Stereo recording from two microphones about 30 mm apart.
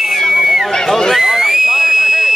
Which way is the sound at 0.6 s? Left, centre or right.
Centre.